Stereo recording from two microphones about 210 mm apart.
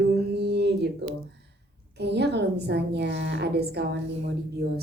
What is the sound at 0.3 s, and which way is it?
Mantra, 50° right (ahead or behind).